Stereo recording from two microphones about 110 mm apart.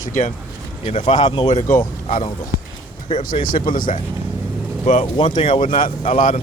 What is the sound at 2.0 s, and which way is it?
Speech, 70° left (ahead or behind).